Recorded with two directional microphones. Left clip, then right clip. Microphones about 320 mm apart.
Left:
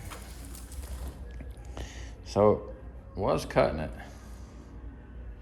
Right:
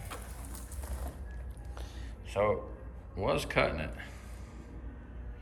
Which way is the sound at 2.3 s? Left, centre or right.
Centre.